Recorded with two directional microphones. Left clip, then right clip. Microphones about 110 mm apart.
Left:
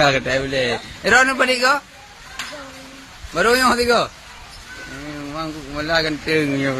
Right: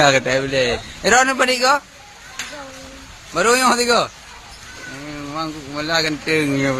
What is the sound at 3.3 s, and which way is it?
Speech, 20° right (ahead or behind).